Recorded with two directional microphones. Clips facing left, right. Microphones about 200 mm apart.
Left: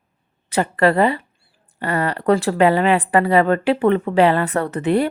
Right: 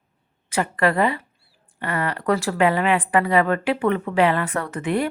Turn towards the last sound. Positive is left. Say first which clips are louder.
# left 5 dB
turn(degrees=35)  # may be behind; listen again after turning